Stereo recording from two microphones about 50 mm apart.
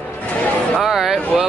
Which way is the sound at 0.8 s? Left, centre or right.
Centre.